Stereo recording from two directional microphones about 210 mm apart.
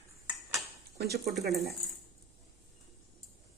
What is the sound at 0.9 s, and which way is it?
Speech, 50° right (ahead or behind).